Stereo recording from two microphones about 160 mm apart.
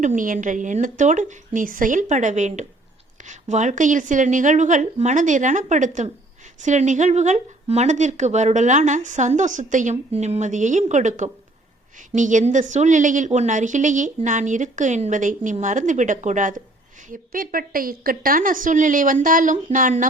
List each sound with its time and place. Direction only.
0.0 s a woman's voice: 55° right (ahead or behind)